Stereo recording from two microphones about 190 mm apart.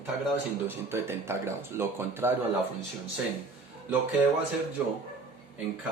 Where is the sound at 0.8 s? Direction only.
15° right (ahead or behind).